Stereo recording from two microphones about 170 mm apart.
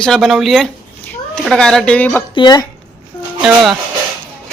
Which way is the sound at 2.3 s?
25° left (ahead or behind).